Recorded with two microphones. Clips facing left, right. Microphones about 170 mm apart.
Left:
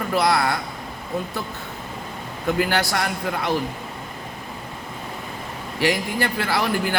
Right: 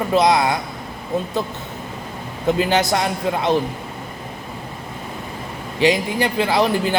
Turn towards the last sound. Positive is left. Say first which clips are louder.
# right 5 dB
turn(degrees=-20)  # may be behind; listen again after turning